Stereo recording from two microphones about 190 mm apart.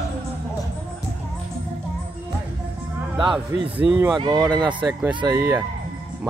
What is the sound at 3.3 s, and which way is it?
Speech, 25° right (ahead or behind).